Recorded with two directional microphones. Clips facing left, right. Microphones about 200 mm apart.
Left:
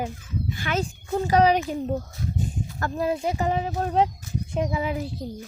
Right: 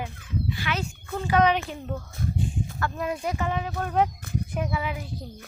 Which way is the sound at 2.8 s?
35° left (ahead or behind).